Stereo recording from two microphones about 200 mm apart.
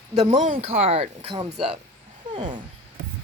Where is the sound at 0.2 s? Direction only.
40° right (ahead or behind).